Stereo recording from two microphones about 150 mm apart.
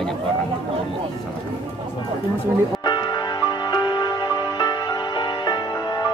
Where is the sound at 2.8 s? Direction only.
30° left (ahead or behind).